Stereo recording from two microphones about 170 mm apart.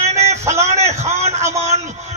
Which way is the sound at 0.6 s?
40° right (ahead or behind).